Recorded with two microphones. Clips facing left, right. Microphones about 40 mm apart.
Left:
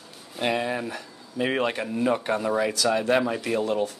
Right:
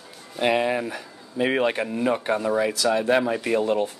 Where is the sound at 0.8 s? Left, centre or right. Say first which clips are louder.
Right 3 dB; centre.